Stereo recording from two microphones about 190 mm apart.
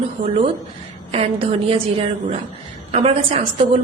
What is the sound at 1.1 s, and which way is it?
A woman's voice, 30° right (ahead or behind).